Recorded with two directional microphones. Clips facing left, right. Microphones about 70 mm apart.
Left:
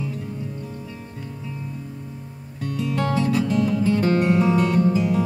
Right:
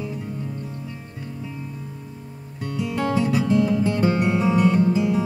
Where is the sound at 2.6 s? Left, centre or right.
Centre.